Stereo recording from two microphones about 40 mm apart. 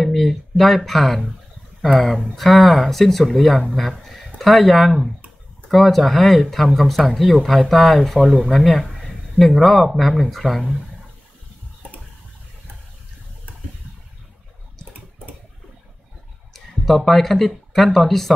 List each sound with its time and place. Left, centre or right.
0.0 s speech: centre
16.5 s a sound: centre
17.5 s speech: centre